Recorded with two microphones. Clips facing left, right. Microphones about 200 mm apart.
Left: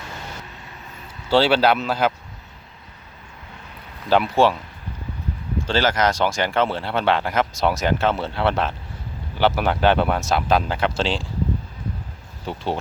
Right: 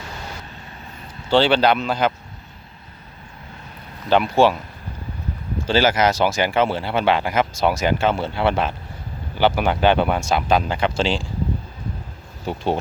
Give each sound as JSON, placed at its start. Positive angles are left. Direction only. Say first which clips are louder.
{"t": 1.3, "sound": "speech", "louder": "right 1 dB", "side_deg": 5}
{"t": 4.1, "sound": "speech", "louder": "right 1 dB", "side_deg": 0}
{"t": 5.6, "sound": "speech", "louder": "right 3 dB", "side_deg": -10}
{"t": 12.5, "sound": "speech", "louder": "right 3 dB", "side_deg": -15}